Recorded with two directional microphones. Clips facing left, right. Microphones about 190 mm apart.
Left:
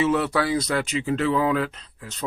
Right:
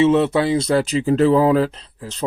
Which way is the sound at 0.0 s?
25° right (ahead or behind).